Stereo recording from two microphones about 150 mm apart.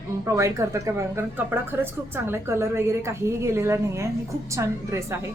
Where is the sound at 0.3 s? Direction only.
20° right (ahead or behind).